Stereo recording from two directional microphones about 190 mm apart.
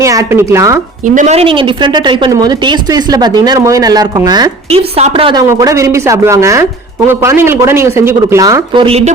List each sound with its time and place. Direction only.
0.0 s speech: 15° right (ahead or behind)
1.0 s speech: 40° right (ahead or behind)